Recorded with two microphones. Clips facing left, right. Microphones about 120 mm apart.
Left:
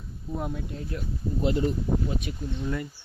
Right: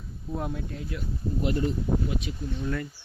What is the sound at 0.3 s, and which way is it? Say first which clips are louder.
Speech: even; centre (ahead or behind).